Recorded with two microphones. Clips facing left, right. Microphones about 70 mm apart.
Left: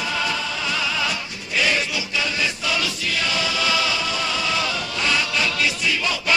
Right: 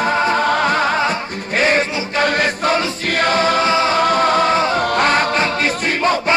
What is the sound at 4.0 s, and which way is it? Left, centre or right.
Music, right.